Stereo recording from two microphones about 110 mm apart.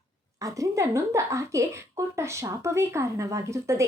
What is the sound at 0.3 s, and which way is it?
Speech, 30° right (ahead or behind).